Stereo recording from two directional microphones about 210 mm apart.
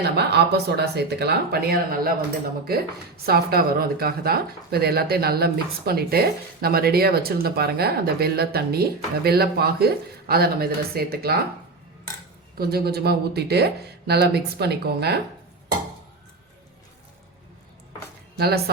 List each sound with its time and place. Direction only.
0.0 s speech: 50° right (ahead or behind)
3.2 s speech: 45° right (ahead or behind)
12.5 s speech: 50° right (ahead or behind)
18.3 s speech: 50° right (ahead or behind)